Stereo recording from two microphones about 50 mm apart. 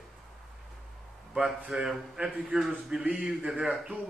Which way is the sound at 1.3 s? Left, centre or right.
Centre.